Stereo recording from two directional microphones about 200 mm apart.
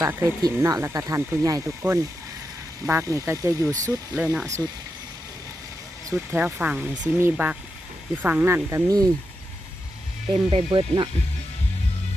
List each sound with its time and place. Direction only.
0.0 s speech: 15° right (ahead or behind)
6.3 s speech: 10° right (ahead or behind)
10.5 s speech: 25° right (ahead or behind)